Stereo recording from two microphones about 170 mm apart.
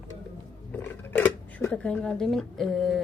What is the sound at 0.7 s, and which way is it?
A woman's voice, 15° left (ahead or behind).